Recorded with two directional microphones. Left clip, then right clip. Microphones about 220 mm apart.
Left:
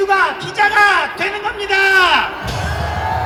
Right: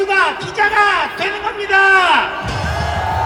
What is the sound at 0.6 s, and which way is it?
Speech, 25° left (ahead or behind).